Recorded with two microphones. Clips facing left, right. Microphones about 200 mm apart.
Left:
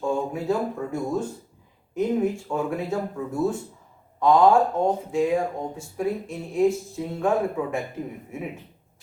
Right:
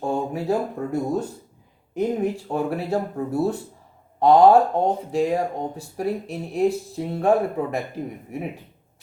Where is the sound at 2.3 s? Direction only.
35° right (ahead or behind).